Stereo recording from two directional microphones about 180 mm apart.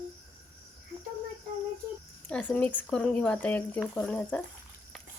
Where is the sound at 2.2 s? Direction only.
5° left (ahead or behind).